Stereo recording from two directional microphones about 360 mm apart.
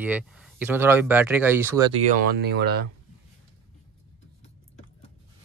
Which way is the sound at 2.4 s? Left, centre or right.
Right.